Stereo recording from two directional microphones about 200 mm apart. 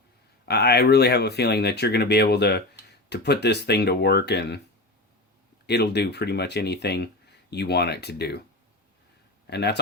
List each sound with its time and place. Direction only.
0.4 s speech: 55° left (ahead or behind)
5.6 s speech: 55° left (ahead or behind)
9.5 s speech: 55° left (ahead or behind)